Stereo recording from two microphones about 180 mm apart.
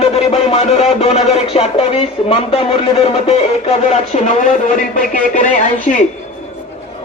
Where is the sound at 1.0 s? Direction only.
35° left (ahead or behind).